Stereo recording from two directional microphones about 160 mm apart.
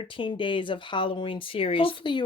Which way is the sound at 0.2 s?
30° left (ahead or behind).